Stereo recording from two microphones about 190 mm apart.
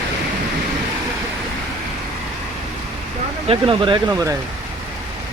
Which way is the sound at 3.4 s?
30° right (ahead or behind).